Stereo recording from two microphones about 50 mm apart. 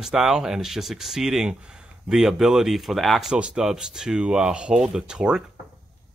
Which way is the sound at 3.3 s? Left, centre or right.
Right.